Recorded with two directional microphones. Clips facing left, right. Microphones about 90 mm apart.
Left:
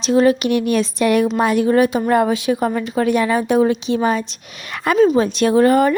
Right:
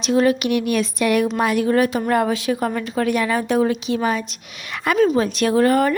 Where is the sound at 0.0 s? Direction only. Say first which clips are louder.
Left 3 dB; 30° left (ahead or behind).